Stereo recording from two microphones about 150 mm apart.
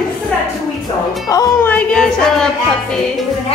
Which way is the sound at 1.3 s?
25° left (ahead or behind).